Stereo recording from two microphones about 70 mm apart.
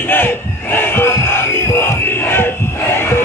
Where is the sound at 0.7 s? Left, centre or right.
Left.